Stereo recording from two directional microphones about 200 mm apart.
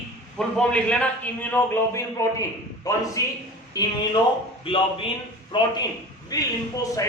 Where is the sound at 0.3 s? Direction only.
5° left (ahead or behind).